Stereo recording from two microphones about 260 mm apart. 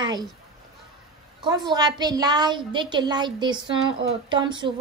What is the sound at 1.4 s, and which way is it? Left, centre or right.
A woman's voice, centre.